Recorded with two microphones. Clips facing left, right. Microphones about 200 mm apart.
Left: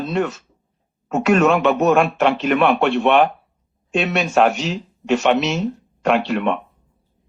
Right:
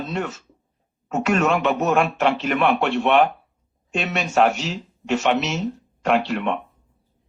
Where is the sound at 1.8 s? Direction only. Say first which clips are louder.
Left 4 dB; 60° left (ahead or behind).